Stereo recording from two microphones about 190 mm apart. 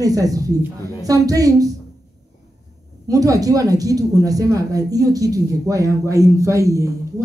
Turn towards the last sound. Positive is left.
turn(degrees=-15)  # may be behind; listen again after turning